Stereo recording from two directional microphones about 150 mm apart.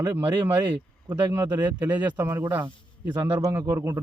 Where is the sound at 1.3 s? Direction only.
15° right (ahead or behind).